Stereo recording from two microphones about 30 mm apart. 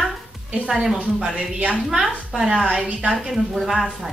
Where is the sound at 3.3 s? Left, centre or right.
Centre.